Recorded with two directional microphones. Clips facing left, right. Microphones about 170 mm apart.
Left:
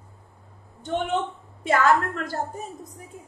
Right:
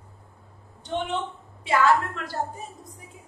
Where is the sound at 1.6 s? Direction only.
45° left (ahead or behind).